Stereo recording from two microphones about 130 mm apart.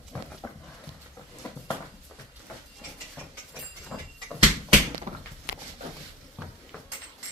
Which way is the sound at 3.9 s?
5° right (ahead or behind).